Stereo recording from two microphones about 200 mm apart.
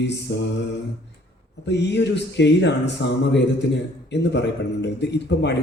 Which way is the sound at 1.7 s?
60° left (ahead or behind).